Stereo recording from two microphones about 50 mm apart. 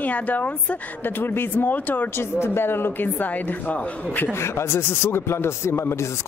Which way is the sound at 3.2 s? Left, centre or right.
Left.